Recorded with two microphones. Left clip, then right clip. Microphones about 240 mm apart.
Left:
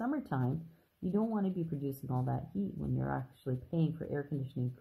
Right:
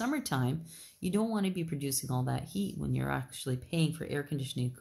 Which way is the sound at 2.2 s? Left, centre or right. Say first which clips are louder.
Right 2 dB; right.